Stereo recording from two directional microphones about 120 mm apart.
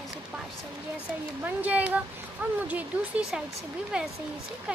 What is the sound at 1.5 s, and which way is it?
Speech, 15° right (ahead or behind).